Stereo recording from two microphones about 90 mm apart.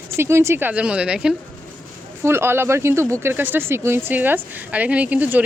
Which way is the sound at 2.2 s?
25° right (ahead or behind).